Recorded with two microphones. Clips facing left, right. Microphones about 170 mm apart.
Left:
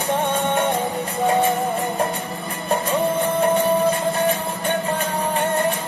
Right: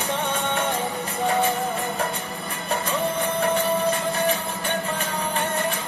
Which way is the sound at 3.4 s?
35° left (ahead or behind).